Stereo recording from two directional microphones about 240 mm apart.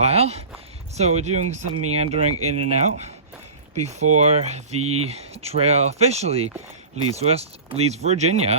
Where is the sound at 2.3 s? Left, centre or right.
Right.